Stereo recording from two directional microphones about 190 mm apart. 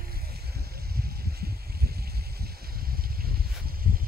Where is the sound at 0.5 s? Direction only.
55° right (ahead or behind).